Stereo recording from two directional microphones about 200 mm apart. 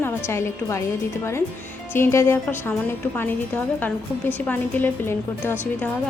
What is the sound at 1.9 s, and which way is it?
A woman's voice, 15° left (ahead or behind).